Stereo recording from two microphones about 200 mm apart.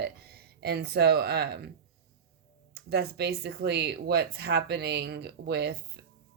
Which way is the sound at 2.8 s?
50° right (ahead or behind).